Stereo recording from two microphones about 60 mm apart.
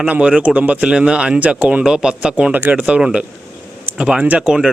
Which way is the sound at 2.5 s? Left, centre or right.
Right.